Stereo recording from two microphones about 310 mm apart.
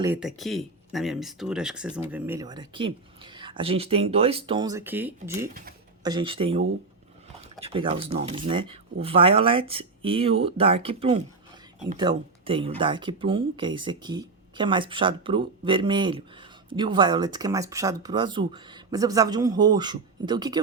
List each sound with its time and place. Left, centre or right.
0.0 s speech: centre
7.6 s speech: centre